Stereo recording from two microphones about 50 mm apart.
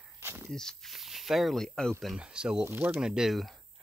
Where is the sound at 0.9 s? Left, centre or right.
Centre.